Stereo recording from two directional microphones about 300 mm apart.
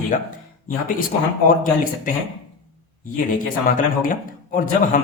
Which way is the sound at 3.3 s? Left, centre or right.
Left.